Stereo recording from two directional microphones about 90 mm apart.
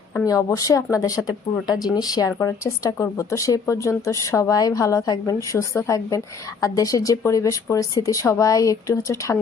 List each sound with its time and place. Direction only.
0.3 s speech: 40° left (ahead or behind)